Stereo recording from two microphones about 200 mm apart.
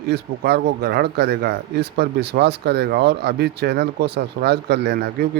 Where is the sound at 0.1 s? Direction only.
55° right (ahead or behind).